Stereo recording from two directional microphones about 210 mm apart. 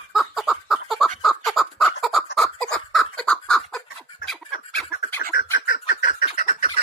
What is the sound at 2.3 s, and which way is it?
Chicken, centre (ahead or behind).